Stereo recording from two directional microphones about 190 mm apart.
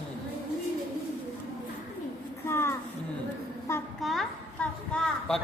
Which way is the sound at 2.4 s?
15° left (ahead or behind).